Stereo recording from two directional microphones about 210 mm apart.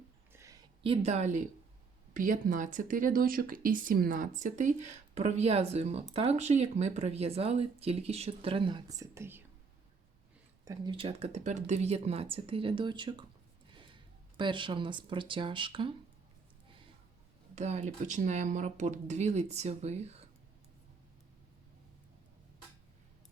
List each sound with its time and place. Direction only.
0.3 s a sound: 15° right (ahead or behind); by 1.5 s 35° right (ahead or behind)
2.1 s speech: 40° right (ahead or behind); by 9.4 s 10° right (ahead or behind)
10.7 s speech: 25° right (ahead or behind)
17.5 s speech: 35° right (ahead or behind)